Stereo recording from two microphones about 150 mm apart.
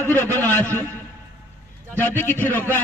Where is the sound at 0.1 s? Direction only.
15° left (ahead or behind).